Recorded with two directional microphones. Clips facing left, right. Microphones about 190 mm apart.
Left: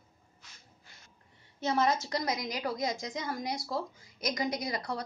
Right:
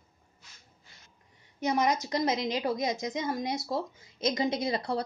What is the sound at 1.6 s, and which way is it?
A woman's voice, 15° right (ahead or behind).